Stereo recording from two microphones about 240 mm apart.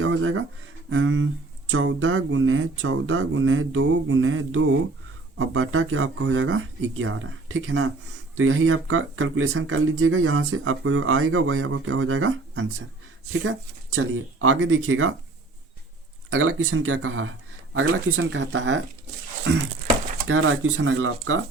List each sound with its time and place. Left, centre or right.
0.0 s speech: right
16.3 s speech: right
20.2 s speech: right